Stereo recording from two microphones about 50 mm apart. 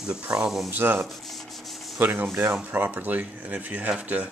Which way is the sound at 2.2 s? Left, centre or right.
Right.